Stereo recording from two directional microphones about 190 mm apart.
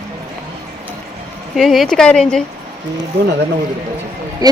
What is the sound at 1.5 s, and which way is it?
Speech, centre (ahead or behind).